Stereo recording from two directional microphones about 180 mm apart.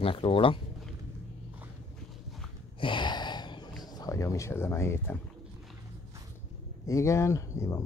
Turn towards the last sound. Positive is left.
turn(degrees=15)  # may be behind; listen again after turning